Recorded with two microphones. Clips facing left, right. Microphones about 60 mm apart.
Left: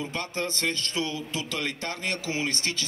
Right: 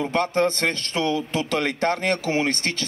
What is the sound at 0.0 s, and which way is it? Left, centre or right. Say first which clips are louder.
A man's voice: right 10 dB; right.